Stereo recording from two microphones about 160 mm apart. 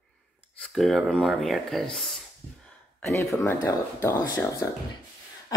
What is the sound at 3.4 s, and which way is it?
Speech, 15° left (ahead or behind).